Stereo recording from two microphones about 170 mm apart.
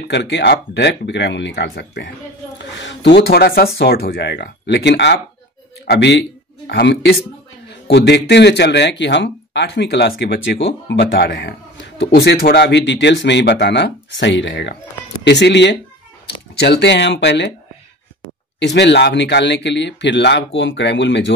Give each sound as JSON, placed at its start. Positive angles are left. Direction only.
{"t": 0.1, "sound": "speech", "side_deg": 90}
{"t": 2.8, "sound": "speech", "side_deg": 90}
{"t": 6.7, "sound": "speech", "side_deg": 80}
{"t": 18.6, "sound": "speech", "side_deg": 90}